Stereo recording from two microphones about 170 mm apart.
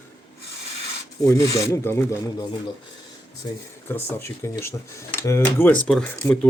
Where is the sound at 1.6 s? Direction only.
15° left (ahead or behind).